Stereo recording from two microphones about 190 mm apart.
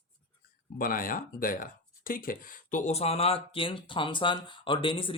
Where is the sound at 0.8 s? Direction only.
50° left (ahead or behind).